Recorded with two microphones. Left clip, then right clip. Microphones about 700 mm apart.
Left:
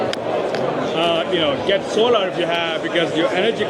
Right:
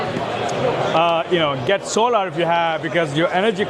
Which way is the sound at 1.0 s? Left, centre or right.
Right.